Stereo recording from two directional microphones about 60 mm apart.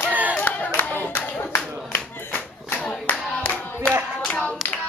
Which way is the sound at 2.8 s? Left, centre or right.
Left.